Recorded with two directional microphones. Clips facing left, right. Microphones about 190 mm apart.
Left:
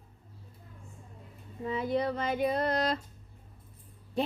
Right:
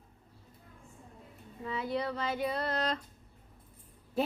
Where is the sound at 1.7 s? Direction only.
45° left (ahead or behind).